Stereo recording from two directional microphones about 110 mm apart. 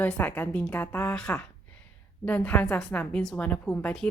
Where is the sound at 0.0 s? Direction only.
15° left (ahead or behind).